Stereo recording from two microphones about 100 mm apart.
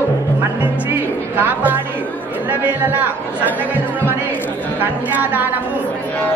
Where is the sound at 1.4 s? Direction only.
20° right (ahead or behind).